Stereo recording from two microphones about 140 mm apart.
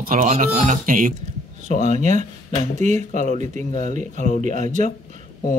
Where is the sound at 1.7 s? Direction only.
55° right (ahead or behind).